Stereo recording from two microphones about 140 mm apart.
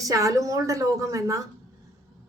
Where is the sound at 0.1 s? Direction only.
25° right (ahead or behind).